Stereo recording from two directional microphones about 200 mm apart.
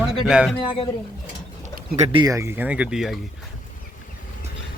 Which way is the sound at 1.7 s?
45° right (ahead or behind).